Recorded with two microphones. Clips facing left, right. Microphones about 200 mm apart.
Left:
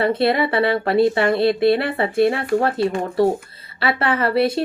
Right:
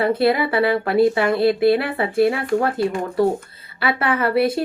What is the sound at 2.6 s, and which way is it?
A woman's voice, 30° left (ahead or behind).